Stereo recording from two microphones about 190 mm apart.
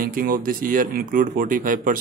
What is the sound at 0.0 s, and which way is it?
Speech, 50° right (ahead or behind).